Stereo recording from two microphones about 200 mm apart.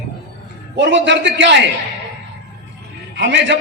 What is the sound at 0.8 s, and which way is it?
Speech, 60° right (ahead or behind).